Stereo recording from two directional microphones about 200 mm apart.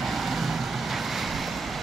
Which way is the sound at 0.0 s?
Centre (ahead or behind).